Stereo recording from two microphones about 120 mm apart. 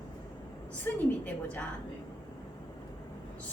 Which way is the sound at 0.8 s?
10° left (ahead or behind).